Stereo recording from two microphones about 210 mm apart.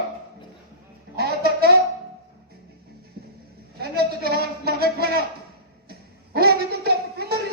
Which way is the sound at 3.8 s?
50° right (ahead or behind).